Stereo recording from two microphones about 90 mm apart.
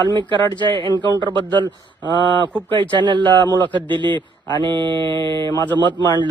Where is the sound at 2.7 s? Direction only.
60° right (ahead or behind).